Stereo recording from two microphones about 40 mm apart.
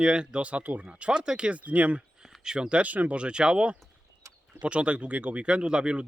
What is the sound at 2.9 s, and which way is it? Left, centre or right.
Speech, right.